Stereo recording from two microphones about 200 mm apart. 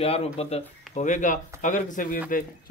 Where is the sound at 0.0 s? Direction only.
30° left (ahead or behind).